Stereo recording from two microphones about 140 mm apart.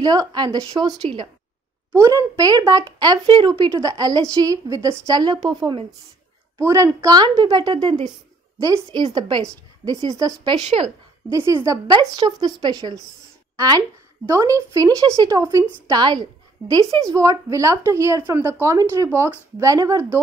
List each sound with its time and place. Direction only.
0.0 s a woman's voice: 25° right (ahead or behind)
1.9 s a woman's voice: 20° right (ahead or behind)